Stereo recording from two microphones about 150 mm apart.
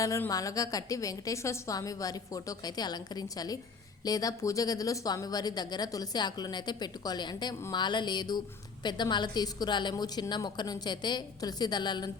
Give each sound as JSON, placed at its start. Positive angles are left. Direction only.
{"t": 0.0, "sound": "speech", "side_deg": 20}